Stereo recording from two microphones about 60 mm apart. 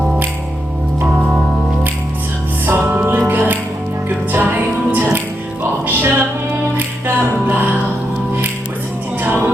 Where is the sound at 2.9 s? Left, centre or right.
Right.